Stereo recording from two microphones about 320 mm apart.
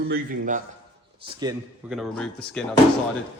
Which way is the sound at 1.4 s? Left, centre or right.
Centre.